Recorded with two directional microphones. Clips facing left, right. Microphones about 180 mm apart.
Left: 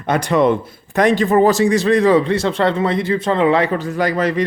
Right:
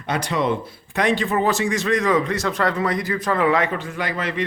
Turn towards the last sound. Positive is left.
turn(degrees=40)  # may be behind; listen again after turning